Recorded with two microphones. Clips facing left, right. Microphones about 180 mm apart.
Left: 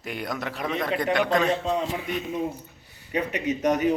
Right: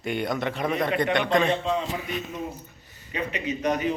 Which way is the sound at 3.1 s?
45° left (ahead or behind).